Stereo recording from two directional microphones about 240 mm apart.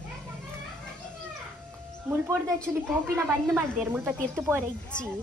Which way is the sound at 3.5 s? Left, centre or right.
Centre.